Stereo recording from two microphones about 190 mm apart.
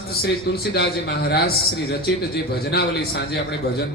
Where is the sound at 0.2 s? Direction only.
55° left (ahead or behind).